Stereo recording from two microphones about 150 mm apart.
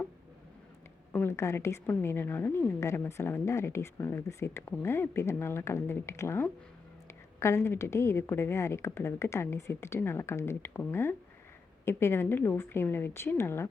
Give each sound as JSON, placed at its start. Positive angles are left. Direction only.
{"t": 1.1, "sound": "a woman's voice", "side_deg": 15}